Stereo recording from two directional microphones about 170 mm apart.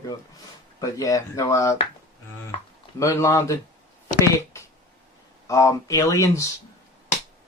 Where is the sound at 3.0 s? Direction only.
15° left (ahead or behind).